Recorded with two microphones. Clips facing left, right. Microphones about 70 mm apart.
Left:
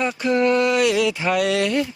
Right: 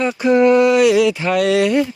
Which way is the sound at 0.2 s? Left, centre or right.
Centre.